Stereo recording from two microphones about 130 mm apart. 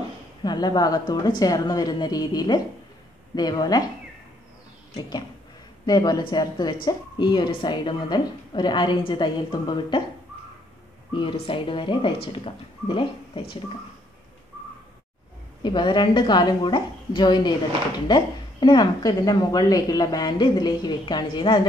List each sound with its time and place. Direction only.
0.4 s a woman's voice: 35° left (ahead or behind)
5.9 s a woman's voice: 30° left (ahead or behind)
11.1 s a woman's voice: 40° left (ahead or behind)
15.6 s a woman's voice: 35° left (ahead or behind)